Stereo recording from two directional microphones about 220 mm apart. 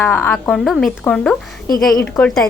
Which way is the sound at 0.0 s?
5° left (ahead or behind).